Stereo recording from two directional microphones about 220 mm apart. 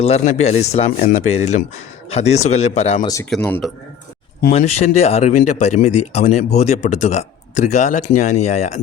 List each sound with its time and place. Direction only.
0.0 s speech: 30° left (ahead or behind)
3.3 s speech: centre (ahead or behind)
4.5 s speech: 30° left (ahead or behind)